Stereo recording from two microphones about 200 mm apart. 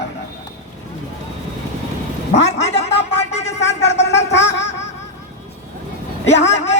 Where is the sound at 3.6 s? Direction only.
60° left (ahead or behind).